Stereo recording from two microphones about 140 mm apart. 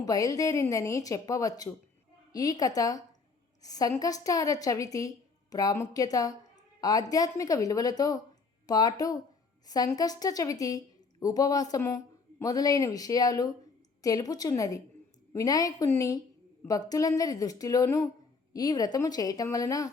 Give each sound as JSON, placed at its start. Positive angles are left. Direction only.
{"t": 0.0, "sound": "a woman's voice", "side_deg": 25}